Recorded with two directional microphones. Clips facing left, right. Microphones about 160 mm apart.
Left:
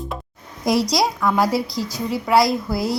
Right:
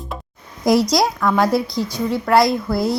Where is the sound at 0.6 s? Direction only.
Centre (ahead or behind).